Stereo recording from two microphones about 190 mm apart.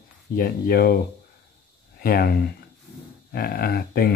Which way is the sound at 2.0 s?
50° left (ahead or behind).